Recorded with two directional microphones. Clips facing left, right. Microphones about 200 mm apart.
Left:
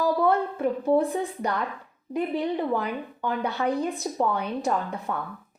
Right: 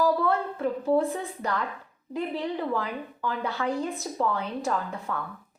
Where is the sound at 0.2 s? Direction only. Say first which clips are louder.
Left 3 dB; 15° left (ahead or behind).